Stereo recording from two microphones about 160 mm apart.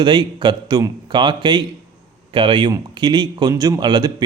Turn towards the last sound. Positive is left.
turn(degrees=-25)  # may be behind; listen again after turning